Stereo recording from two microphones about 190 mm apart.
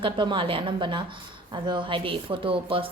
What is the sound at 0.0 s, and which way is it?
A woman's voice, 25° right (ahead or behind).